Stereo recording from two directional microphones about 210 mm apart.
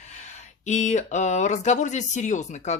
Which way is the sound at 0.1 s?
35° left (ahead or behind).